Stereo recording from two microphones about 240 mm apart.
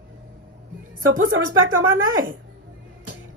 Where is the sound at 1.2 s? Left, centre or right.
Right.